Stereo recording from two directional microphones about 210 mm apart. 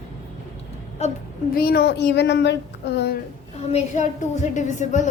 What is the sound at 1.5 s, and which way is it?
Speech, 45° left (ahead or behind).